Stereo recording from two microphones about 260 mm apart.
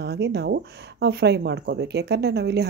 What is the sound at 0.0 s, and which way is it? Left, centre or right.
Speech, right.